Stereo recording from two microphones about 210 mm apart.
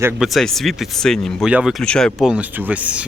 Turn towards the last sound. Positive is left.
turn(degrees=-5)  # may be behind; listen again after turning